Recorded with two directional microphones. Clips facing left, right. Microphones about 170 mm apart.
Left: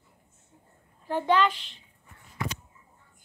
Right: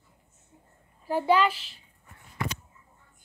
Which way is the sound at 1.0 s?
10° right (ahead or behind).